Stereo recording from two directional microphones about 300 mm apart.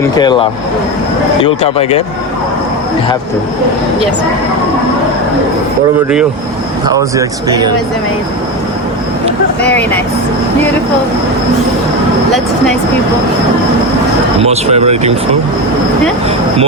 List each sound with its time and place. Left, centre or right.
0.0 s speech: centre
6.8 s speech: centre
9.6 s vehicle: centre
14.4 s speech: right